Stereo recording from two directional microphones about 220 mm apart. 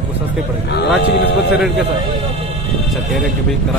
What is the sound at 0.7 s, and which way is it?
Speech, 50° left (ahead or behind).